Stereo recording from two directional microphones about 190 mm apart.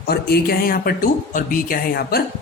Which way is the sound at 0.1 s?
55° left (ahead or behind).